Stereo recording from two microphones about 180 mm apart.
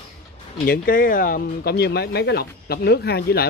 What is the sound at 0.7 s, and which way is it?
Speech, 50° left (ahead or behind).